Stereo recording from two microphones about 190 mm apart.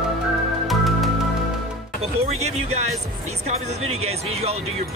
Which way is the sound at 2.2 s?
35° right (ahead or behind).